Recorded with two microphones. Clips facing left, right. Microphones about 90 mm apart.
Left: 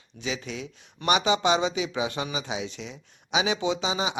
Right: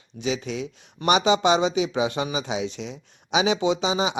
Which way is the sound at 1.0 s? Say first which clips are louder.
Right 4 dB; 20° right (ahead or behind).